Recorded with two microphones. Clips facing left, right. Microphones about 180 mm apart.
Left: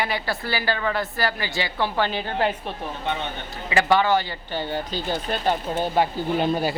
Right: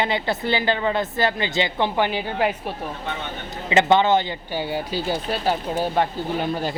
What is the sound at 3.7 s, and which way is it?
Speech, 20° right (ahead or behind).